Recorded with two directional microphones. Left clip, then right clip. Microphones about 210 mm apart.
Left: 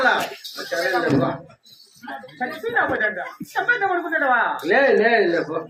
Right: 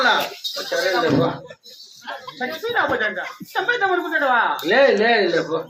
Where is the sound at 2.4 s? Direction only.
5° right (ahead or behind).